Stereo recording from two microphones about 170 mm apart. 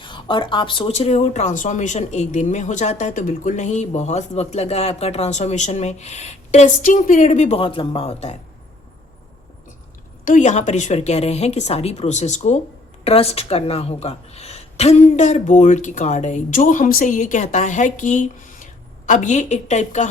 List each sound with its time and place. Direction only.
0.0 s speech: 30° left (ahead or behind)
10.2 s a woman's voice: 45° left (ahead or behind)